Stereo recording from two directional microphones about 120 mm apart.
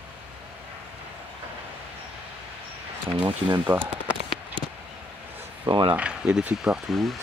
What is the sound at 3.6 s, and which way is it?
Speech, 15° right (ahead or behind).